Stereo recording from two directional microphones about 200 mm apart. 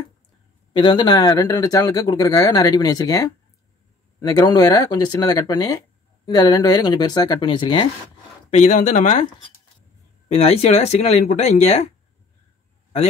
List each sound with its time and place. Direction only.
0.7 s speech: 20° left (ahead or behind)
8.5 s speech: 35° left (ahead or behind)